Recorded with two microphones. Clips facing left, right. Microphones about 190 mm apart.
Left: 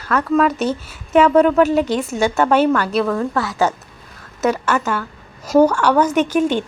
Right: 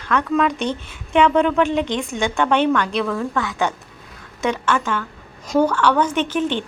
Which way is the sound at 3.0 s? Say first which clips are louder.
Left 3 dB; 40° left (ahead or behind).